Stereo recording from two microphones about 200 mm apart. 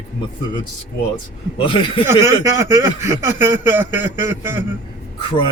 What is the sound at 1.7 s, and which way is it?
Speech, 25° left (ahead or behind).